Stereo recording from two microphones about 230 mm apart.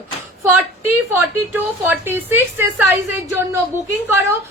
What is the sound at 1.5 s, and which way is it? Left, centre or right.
Speech, centre.